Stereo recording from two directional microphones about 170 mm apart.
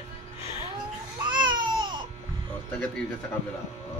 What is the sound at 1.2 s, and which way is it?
Baby cry, 25° right (ahead or behind).